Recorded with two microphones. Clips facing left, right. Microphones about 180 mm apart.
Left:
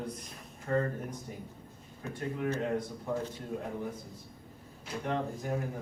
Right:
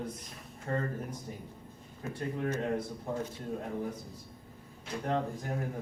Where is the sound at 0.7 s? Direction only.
35° right (ahead or behind).